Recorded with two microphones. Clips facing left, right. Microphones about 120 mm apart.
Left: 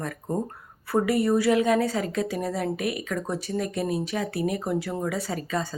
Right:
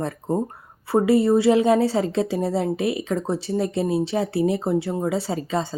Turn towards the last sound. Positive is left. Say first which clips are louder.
# right 4 dB
turn(degrees=-25)  # may be behind; listen again after turning